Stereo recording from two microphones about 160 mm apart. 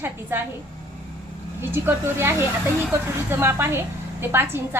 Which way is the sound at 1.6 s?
15° right (ahead or behind).